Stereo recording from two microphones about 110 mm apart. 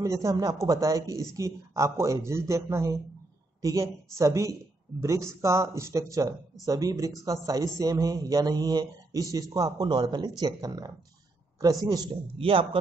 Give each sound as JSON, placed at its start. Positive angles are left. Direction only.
{"t": 0.0, "sound": "speech", "side_deg": -30}
{"t": 4.2, "sound": "a man's voice", "side_deg": -30}
{"t": 12.1, "sound": "a man's voice", "side_deg": -55}